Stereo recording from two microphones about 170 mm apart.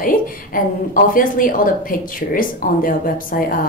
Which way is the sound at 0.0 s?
55° left (ahead or behind).